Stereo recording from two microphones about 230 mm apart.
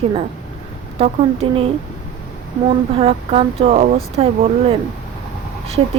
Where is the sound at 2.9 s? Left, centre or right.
Right.